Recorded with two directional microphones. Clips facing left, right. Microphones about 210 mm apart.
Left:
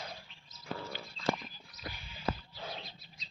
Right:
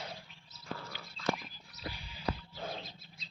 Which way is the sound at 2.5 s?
50° right (ahead or behind).